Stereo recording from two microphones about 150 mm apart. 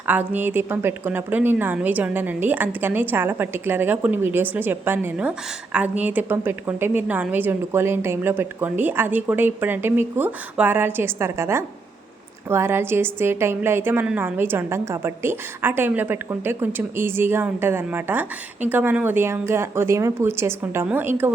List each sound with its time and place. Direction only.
0.1 s a woman's voice: 10° right (ahead or behind)